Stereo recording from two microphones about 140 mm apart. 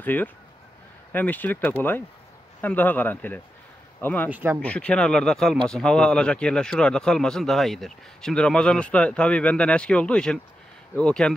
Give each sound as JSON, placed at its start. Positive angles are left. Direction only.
{"t": 0.0, "sound": "speech", "side_deg": 10}
{"t": 4.3, "sound": "speech", "side_deg": -15}
{"t": 4.6, "sound": "speech", "side_deg": 10}